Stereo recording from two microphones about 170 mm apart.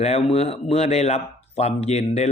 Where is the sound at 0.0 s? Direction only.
40° left (ahead or behind).